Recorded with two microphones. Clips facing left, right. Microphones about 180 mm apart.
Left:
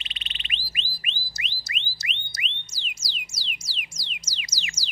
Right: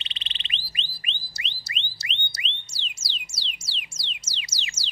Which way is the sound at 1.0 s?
30° right (ahead or behind).